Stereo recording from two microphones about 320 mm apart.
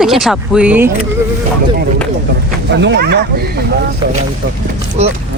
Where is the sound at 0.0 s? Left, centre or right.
Centre.